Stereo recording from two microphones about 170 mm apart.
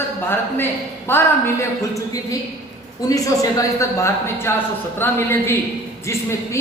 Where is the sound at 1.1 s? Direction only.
15° left (ahead or behind).